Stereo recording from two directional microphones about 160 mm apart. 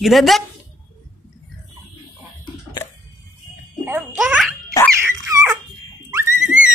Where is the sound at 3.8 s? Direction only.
10° right (ahead or behind).